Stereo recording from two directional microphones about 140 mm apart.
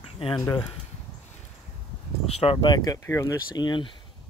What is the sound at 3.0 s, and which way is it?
Speech, 20° left (ahead or behind).